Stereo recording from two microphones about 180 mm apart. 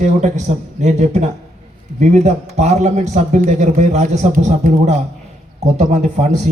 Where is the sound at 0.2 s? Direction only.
40° right (ahead or behind).